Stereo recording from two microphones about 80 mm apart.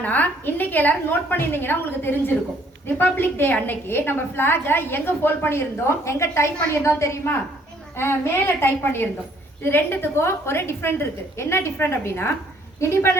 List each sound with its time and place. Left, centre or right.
0.0 s a woman's voice: left